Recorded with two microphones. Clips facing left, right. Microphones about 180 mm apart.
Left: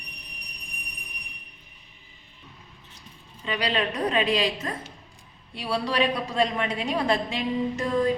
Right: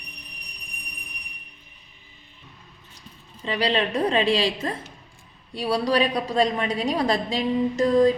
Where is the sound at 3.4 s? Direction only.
30° right (ahead or behind).